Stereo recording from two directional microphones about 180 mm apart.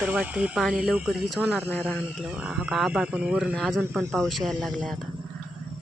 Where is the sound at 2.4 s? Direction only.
5° right (ahead or behind).